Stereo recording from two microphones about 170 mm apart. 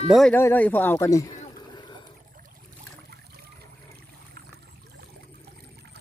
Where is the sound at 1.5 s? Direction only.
25° left (ahead or behind).